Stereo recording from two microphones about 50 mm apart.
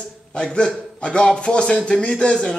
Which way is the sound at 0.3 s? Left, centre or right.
Centre.